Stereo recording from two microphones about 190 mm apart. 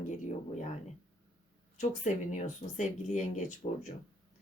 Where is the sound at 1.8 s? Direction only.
40° left (ahead or behind).